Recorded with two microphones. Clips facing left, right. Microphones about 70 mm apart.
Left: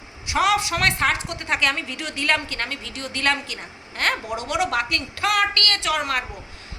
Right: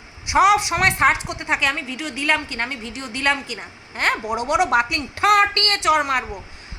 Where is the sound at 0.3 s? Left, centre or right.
Centre.